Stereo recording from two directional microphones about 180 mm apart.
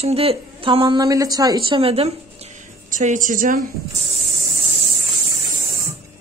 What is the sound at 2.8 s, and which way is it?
Speech, 45° right (ahead or behind).